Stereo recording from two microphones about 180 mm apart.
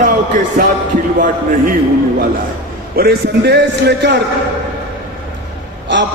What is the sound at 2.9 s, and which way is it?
A man's voice, 60° right (ahead or behind).